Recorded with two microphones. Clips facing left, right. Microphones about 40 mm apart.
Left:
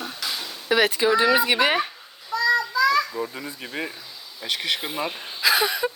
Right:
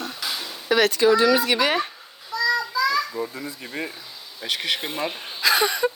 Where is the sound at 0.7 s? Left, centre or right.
Centre.